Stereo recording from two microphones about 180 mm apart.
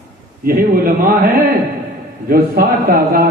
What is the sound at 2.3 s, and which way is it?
Speech, 55° right (ahead or behind).